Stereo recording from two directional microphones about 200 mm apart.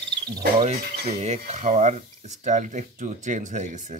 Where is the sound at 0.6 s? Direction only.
35° right (ahead or behind).